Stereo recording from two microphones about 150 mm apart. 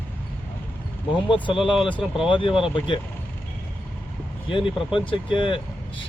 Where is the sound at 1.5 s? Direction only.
Centre (ahead or behind).